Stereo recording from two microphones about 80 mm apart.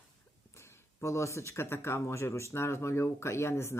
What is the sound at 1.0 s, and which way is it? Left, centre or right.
Speech, left.